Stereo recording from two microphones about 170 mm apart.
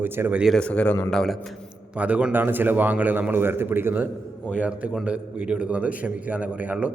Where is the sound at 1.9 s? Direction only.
10° right (ahead or behind).